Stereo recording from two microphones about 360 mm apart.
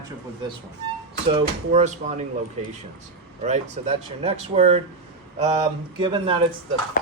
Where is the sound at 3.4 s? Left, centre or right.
Centre.